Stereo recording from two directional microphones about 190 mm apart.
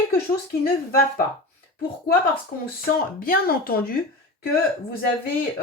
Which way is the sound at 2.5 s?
50° left (ahead or behind).